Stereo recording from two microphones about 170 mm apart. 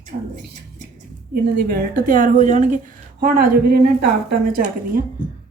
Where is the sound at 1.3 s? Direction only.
65° right (ahead or behind).